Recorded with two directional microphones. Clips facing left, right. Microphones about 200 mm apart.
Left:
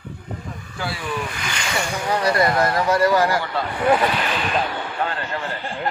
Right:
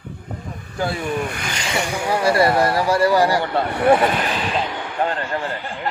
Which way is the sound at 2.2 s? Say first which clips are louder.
Right 3 dB; 30° right (ahead or behind).